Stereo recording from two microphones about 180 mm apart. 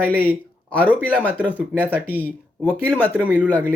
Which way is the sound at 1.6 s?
10° right (ahead or behind).